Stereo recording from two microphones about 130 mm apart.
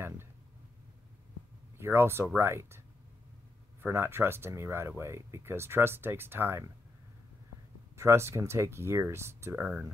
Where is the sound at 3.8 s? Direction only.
20° right (ahead or behind).